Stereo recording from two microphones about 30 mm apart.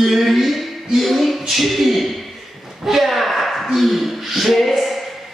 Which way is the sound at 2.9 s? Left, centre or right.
Centre.